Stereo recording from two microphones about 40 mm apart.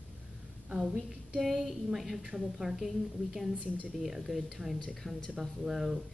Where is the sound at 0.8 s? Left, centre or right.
Centre.